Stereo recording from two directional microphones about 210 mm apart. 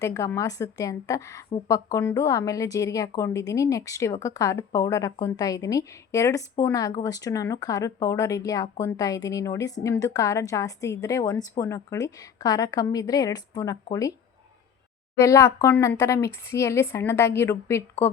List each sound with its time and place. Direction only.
0.0 s a woman's voice: 15° left (ahead or behind)
15.2 s a woman's voice: 15° left (ahead or behind)